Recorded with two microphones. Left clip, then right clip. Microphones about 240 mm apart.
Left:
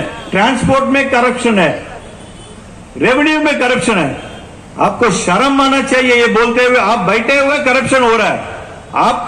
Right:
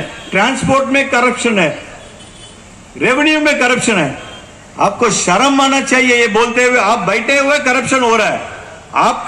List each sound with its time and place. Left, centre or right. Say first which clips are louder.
0.3 s a man's voice: left 1 dB; right
3.0 s a man's voice: left 1 dB; right